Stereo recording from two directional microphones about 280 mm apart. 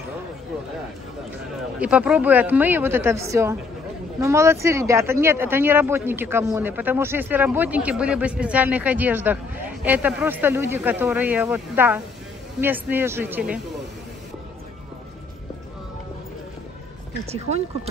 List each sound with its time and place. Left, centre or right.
1.8 s speech: centre